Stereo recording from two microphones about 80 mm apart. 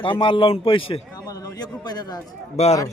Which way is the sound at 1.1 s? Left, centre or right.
Left.